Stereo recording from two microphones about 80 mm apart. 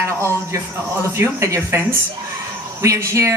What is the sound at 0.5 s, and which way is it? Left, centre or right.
Speech, right.